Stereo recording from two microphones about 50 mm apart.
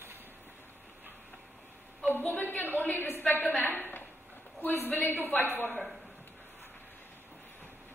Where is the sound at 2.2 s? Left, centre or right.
Left.